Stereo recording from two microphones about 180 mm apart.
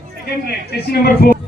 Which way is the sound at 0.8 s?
60° left (ahead or behind).